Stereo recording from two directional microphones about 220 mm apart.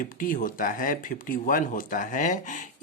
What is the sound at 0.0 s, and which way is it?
Speech, 40° left (ahead or behind).